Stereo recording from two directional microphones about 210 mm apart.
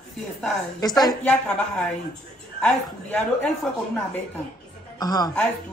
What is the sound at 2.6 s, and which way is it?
Speech, 5° left (ahead or behind).